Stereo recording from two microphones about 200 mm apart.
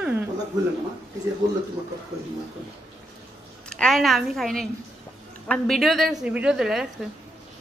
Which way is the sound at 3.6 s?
5° left (ahead or behind).